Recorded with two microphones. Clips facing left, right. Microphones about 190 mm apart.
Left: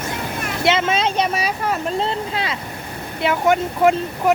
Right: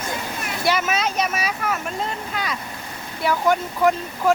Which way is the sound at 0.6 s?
25° left (ahead or behind).